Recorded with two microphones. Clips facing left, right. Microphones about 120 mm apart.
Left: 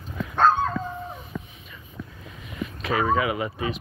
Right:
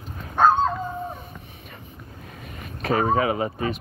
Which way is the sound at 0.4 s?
15° right (ahead or behind).